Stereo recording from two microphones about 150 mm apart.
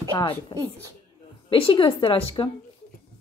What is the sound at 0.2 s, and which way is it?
A woman's voice, 35° left (ahead or behind).